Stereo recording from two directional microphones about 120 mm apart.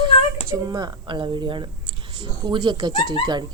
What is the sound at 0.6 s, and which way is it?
Speech, 35° right (ahead or behind).